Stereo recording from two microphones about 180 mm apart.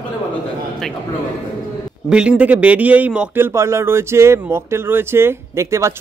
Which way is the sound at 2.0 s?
5° right (ahead or behind).